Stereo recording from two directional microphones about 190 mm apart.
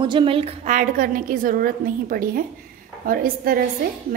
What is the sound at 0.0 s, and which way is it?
A woman's voice, 25° right (ahead or behind).